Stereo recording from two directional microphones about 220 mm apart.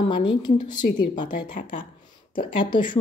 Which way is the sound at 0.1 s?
20° left (ahead or behind).